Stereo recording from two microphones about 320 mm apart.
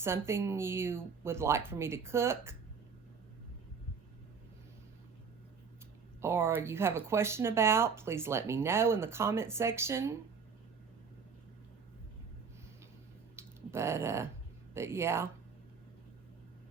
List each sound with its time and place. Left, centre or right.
0.0 s speech: centre
6.2 s speech: centre
13.3 s a sound: centre
14.7 s speech: centre